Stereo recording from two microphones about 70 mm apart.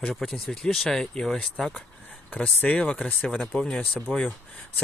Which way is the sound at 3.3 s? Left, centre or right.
Centre.